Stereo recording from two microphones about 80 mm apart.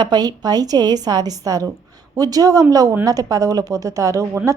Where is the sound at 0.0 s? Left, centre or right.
Right.